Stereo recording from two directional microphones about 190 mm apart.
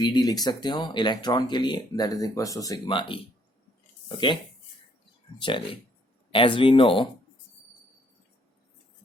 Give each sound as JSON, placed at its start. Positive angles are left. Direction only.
{"t": 0.0, "sound": "speech", "side_deg": 20}
{"t": 5.4, "sound": "speech", "side_deg": 25}